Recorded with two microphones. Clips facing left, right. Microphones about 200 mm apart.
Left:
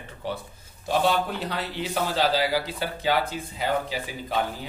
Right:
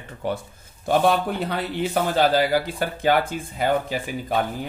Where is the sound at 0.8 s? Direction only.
55° right (ahead or behind).